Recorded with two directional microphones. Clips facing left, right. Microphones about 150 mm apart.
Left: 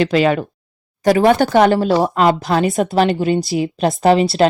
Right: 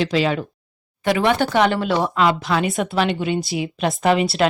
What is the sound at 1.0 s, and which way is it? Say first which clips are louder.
Speech: left 6 dB; 40° left (ahead or behind).